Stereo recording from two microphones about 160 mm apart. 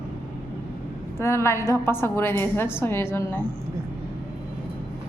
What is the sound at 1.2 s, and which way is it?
A woman's voice, 15° left (ahead or behind).